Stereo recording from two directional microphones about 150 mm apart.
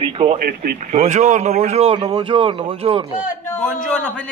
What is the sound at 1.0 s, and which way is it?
A man's voice, 55° right (ahead or behind).